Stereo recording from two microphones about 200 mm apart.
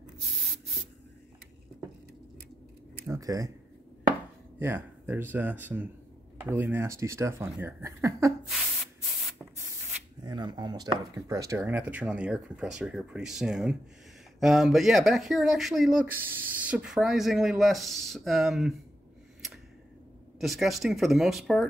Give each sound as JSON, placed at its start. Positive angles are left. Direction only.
{"t": 3.1, "sound": "speech", "side_deg": -15}
{"t": 4.6, "sound": "speech", "side_deg": -10}
{"t": 10.2, "sound": "speech", "side_deg": -20}
{"t": 20.3, "sound": "speech", "side_deg": 0}